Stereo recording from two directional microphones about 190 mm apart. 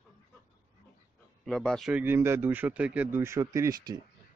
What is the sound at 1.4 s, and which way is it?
Speech, centre (ahead or behind).